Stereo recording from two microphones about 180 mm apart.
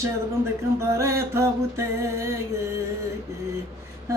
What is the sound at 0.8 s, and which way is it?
Speech, 15° right (ahead or behind).